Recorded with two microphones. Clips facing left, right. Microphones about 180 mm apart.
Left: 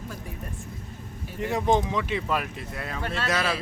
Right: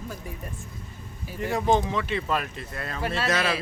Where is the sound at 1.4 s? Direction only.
20° left (ahead or behind).